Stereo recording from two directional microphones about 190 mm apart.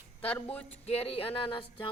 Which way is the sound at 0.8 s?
30° left (ahead or behind).